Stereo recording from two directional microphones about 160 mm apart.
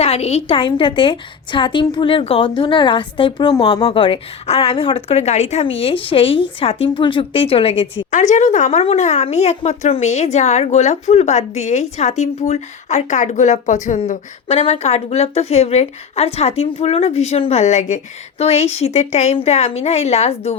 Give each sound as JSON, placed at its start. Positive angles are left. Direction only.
{"t": 0.0, "sound": "a woman's voice", "side_deg": 40}